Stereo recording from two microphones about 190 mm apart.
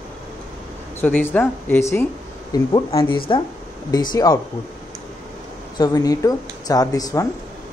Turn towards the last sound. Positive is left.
turn(degrees=20)  # may be behind; listen again after turning